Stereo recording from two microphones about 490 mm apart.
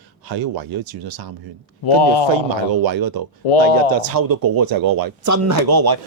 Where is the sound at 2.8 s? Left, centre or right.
Right.